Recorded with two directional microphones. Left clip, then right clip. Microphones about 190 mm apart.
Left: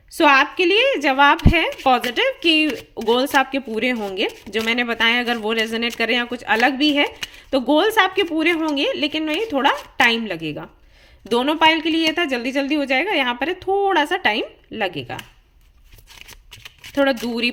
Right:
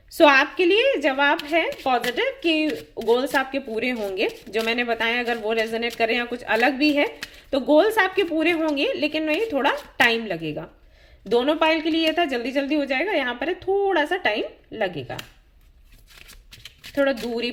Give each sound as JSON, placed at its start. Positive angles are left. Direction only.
{"t": 0.2, "sound": "speech", "side_deg": 20}
{"t": 16.9, "sound": "speech", "side_deg": 40}